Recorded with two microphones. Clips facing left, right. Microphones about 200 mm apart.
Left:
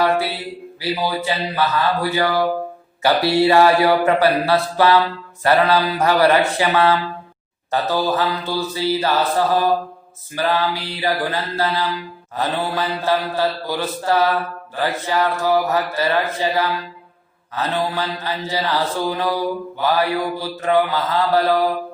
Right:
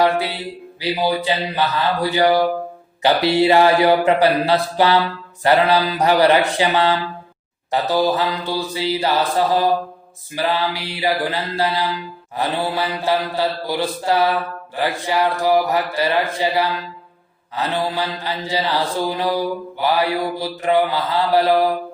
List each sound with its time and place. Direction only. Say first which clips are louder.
0.8 s mantra: right 2 dB; 20° right (ahead or behind)
3.0 s a man's voice: even; 20° right (ahead or behind)
5.4 s mantra: right 1 dB; 15° right (ahead or behind)